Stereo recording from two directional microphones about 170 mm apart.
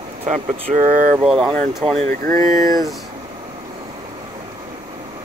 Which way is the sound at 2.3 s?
20° left (ahead or behind).